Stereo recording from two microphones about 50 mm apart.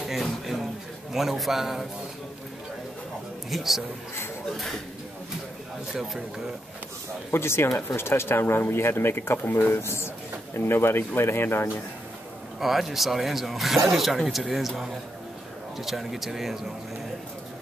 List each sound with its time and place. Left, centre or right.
0.1 s a sound: centre
1.1 s speech: centre
3.4 s speech: centre
7.2 s speech: left
12.5 s speech: centre
15.8 s speech: centre